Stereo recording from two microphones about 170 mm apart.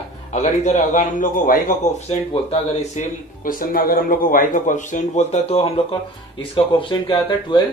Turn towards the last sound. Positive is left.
turn(degrees=25)  # may be behind; listen again after turning